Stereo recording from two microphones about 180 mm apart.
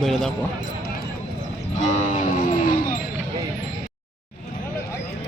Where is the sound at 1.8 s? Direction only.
40° left (ahead or behind).